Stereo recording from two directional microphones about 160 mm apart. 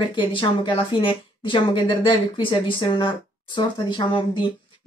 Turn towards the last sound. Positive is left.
turn(degrees=30)  # may be behind; listen again after turning